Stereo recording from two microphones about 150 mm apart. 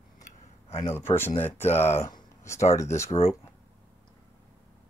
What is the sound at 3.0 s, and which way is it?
Speech, 40° left (ahead or behind).